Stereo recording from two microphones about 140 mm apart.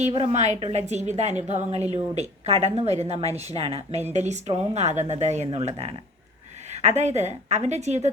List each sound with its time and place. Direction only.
0.0 s a woman's voice: 45° right (ahead or behind)